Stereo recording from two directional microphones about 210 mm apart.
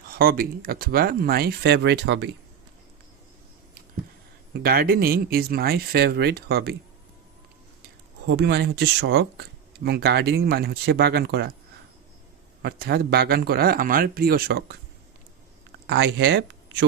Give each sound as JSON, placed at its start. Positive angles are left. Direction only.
{"t": 0.1, "sound": "speech", "side_deg": -45}
{"t": 4.5, "sound": "speech", "side_deg": -45}
{"t": 8.3, "sound": "speech", "side_deg": -50}
{"t": 12.6, "sound": "speech", "side_deg": -50}
{"t": 15.9, "sound": "speech", "side_deg": -60}